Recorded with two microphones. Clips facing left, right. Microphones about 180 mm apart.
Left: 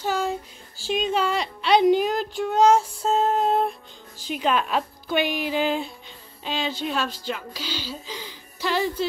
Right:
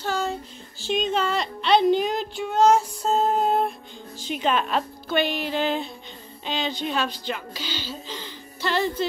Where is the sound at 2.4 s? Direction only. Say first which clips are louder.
Left 1 dB; 5° right (ahead or behind).